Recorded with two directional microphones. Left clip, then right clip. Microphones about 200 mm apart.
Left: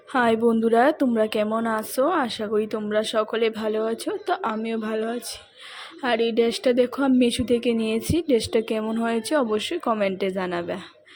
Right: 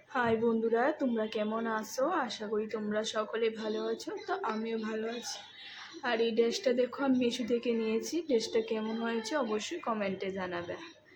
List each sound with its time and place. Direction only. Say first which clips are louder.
0.1 s a woman's voice: left 9 dB; 45° left (ahead or behind)